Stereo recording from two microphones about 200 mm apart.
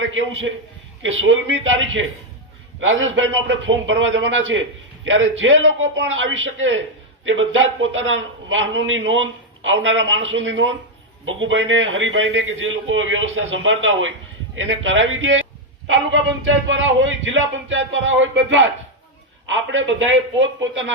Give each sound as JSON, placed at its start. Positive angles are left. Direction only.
{"t": 0.1, "sound": "a man's voice", "side_deg": -75}